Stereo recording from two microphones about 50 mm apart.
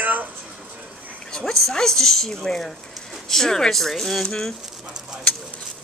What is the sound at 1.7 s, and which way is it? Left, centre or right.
A woman's voice, centre.